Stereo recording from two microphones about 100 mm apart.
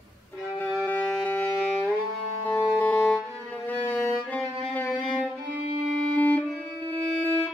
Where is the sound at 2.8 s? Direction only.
15° left (ahead or behind).